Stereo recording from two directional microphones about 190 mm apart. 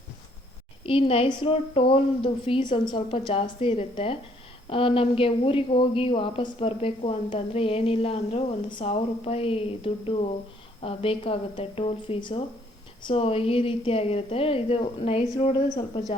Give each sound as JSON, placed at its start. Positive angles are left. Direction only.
{"t": 0.9, "sound": "a woman's voice", "side_deg": 30}